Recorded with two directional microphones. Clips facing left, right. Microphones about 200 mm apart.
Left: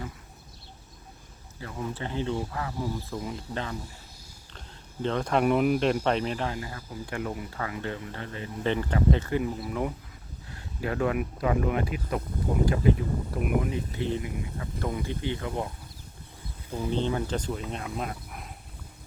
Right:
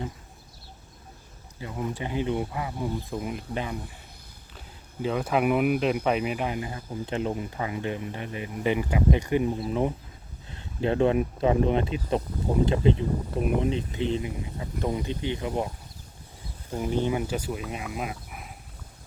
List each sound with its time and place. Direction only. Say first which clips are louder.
1.6 s speech: right 2 dB; 15° right (ahead or behind)
5.0 s speech: even; 5° right (ahead or behind)
16.7 s speech: right 2 dB; 10° right (ahead or behind)